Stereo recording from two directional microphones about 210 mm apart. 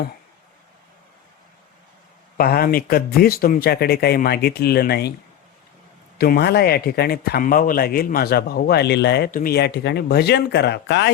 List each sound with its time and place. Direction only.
2.4 s speech: 45° left (ahead or behind)
6.1 s speech: 50° left (ahead or behind)